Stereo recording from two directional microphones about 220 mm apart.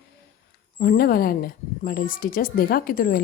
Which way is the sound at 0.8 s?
40° left (ahead or behind).